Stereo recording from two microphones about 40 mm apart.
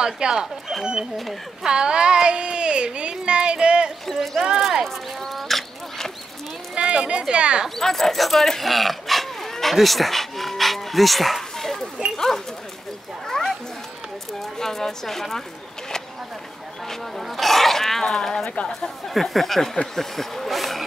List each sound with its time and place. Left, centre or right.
0.0 s speech: right
1.6 s speech: right
4.1 s speech: centre
4.8 s duck: centre
6.7 s speech: right
7.7 s speech: centre
12.0 s a sound: right
13.3 s cat: centre
14.4 s speech: centre
17.2 s speech: centre
20.0 s a sound: centre